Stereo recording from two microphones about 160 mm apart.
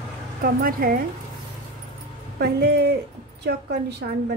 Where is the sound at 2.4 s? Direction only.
85° right.